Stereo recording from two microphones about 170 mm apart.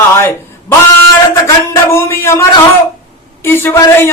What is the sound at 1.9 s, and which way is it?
Speech, 15° left (ahead or behind).